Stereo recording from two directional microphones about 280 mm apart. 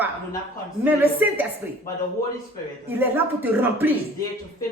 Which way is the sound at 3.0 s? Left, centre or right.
Centre.